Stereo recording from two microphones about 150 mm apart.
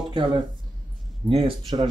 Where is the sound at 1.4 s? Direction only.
30° right (ahead or behind).